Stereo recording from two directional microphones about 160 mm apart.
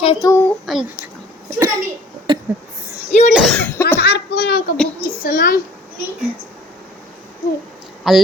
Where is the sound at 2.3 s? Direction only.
30° right (ahead or behind).